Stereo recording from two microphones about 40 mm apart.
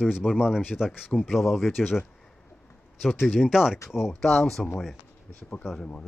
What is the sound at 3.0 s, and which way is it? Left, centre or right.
Speech, centre.